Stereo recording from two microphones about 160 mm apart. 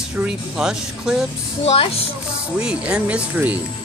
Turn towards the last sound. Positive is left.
turn(degrees=-10)  # may be behind; listen again after turning